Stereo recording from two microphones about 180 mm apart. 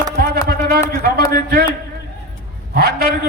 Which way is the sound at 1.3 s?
55° right (ahead or behind).